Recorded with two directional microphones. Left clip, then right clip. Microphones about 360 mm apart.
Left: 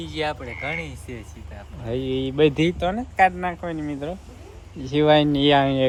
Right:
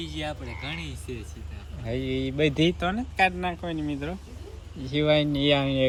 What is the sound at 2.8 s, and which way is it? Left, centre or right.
Speech, centre.